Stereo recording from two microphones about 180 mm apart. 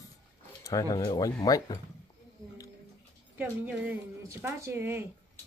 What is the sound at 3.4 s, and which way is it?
A woman's voice, 10° right (ahead or behind).